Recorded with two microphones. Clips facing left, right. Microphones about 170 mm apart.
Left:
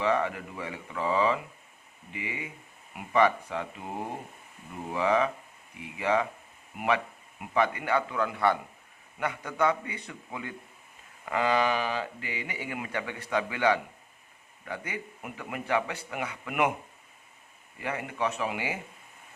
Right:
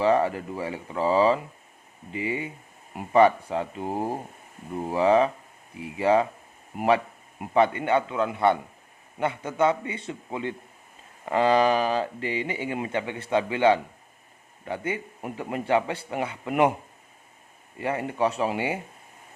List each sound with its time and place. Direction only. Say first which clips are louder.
0.0 s a man's voice: right 6 dB; 35° right (ahead or behind)
17.7 s a man's voice: right 6 dB; 30° right (ahead or behind)